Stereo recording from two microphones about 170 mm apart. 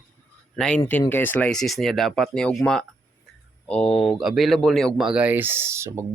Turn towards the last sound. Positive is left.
turn(degrees=-15)  # may be behind; listen again after turning